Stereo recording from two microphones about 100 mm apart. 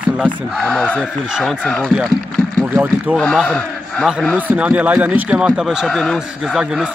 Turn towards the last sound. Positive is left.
turn(degrees=-10)  # may be behind; listen again after turning